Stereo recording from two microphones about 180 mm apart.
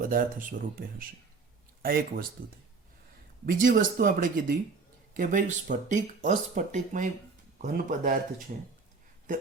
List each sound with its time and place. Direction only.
0.0 s speech: 50° right (ahead or behind)
1.8 s speech: 55° right (ahead or behind)
3.4 s speech: 50° right (ahead or behind)